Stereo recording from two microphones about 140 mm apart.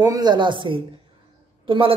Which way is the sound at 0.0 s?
30° right (ahead or behind).